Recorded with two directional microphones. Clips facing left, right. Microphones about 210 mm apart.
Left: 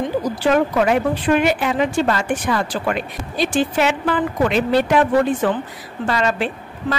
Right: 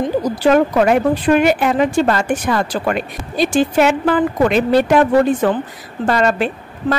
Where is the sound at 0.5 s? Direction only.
45° right (ahead or behind).